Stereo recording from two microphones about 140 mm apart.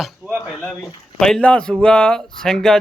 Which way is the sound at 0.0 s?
Centre (ahead or behind).